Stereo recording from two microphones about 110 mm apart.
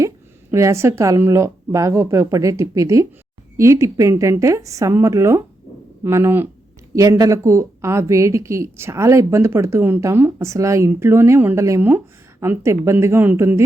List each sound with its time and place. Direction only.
0.5 s a woman's voice: 25° right (ahead or behind)